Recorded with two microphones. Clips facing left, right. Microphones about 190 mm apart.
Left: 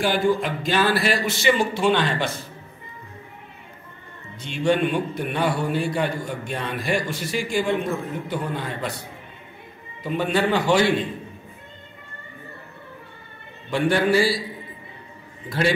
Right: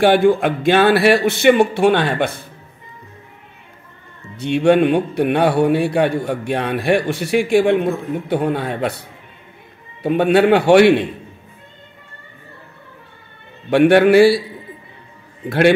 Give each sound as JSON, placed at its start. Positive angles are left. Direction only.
{"t": 0.0, "sound": "a man's voice", "side_deg": -65}
{"t": 4.4, "sound": "a man's voice", "side_deg": -65}
{"t": 10.0, "sound": "a man's voice", "side_deg": -65}
{"t": 13.7, "sound": "a man's voice", "side_deg": -65}